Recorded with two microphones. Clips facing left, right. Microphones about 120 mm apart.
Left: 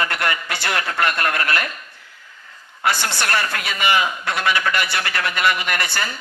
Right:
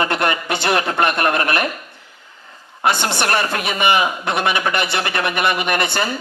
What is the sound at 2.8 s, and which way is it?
Speech, 25° right (ahead or behind).